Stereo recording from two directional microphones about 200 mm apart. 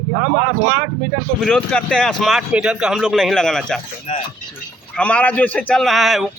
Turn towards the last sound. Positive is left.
turn(degrees=0)  # may be behind; listen again after turning